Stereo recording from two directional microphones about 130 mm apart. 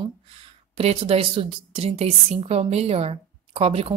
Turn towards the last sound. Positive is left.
turn(degrees=-50)  # may be behind; listen again after turning